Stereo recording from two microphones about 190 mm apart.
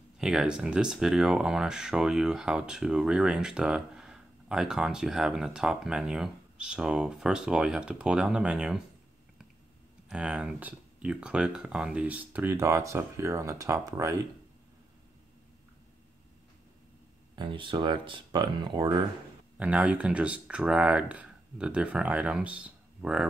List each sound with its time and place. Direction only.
0.2 s speech: 5° right (ahead or behind)
10.0 s speech: 5° right (ahead or behind)
17.4 s speech: 25° right (ahead or behind)
19.6 s speech: 5° right (ahead or behind)